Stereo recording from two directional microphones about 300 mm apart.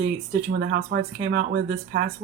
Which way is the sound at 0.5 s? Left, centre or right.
Right.